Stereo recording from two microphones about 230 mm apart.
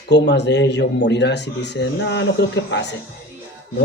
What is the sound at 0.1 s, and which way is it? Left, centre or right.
Speech, left.